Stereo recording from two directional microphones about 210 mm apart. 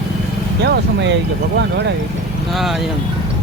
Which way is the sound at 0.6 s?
55° right (ahead or behind).